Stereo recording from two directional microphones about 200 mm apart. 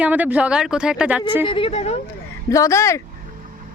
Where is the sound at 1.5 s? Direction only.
25° left (ahead or behind).